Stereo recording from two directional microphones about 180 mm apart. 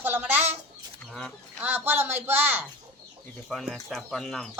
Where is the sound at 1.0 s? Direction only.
Centre (ahead or behind).